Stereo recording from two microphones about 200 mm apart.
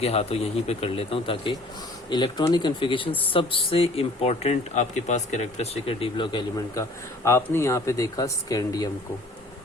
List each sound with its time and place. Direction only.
0.0 s speech: 30° left (ahead or behind)